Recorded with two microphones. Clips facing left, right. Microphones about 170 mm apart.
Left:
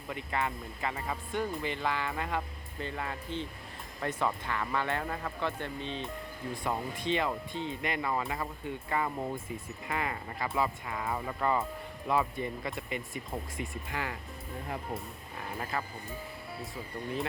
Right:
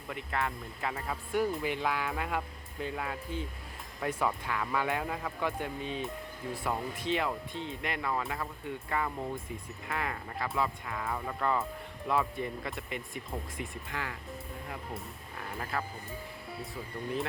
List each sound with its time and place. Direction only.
0.1 s speech: centre (ahead or behind)
13.9 s speech: 15° left (ahead or behind)
15.5 s speech: centre (ahead or behind)